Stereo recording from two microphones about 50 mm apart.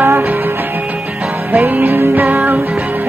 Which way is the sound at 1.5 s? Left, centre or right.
Right.